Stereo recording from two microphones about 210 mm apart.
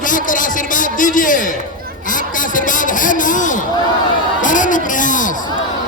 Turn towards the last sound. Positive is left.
turn(degrees=40)  # may be behind; listen again after turning